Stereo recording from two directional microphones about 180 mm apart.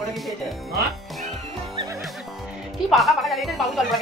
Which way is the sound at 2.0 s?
Centre (ahead or behind).